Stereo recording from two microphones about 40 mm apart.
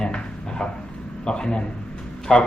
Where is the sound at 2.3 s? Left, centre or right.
Centre.